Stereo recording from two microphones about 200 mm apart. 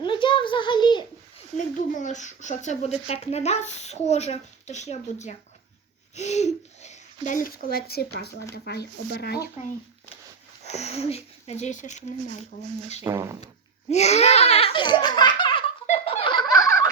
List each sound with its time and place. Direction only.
0.0 s a sound: 25° left (ahead or behind)
1.5 s speech: 40° left (ahead or behind)
10.6 s speech: 35° left (ahead or behind)
13.1 s speech: 15° right (ahead or behind)
13.9 s laughter: 35° left (ahead or behind)